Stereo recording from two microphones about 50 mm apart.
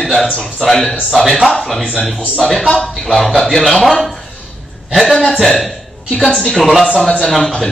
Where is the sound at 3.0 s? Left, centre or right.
Centre.